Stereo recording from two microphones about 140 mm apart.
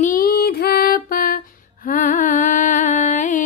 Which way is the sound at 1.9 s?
70° left (ahead or behind).